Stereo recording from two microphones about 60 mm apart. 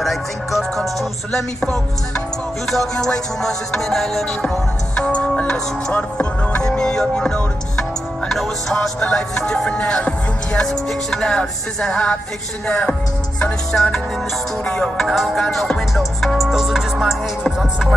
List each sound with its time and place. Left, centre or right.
0.0 s music: centre
10.7 s music: centre
15.0 s music: centre